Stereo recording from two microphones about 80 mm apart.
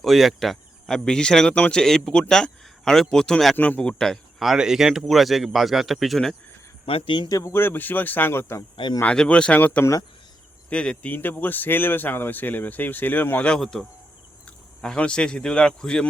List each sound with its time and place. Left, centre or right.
0.0 s speech: centre
7.3 s speech: left
7.5 s speech: left
9.0 s speech: centre
13.5 s speech: centre